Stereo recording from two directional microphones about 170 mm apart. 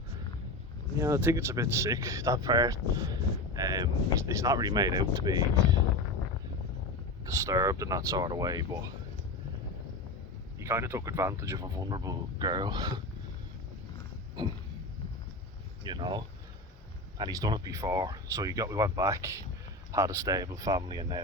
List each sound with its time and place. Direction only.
0.9 s speech: 15° right (ahead or behind)
7.3 s speech: 20° right (ahead or behind)
10.6 s speech: 15° right (ahead or behind)
14.4 s speech: 25° right (ahead or behind)
15.8 s speech: 25° right (ahead or behind)